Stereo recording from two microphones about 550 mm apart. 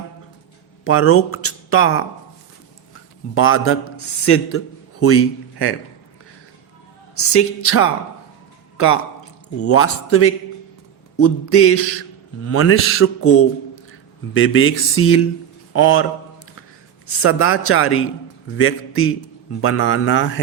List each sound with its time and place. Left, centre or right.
0.9 s speech: left
3.3 s a man's voice: left
7.2 s a man's voice: left
9.6 s a man's voice: left
17.2 s a man's voice: left